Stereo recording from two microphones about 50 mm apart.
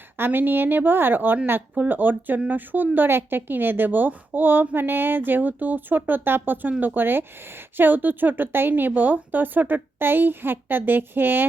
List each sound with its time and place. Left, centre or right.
0.2 s a woman's voice: right